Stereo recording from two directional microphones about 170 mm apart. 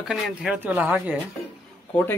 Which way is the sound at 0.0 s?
5° right (ahead or behind).